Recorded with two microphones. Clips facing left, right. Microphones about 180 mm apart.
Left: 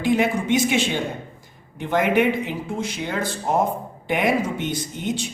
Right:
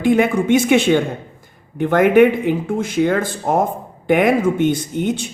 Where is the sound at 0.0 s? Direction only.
55° right (ahead or behind).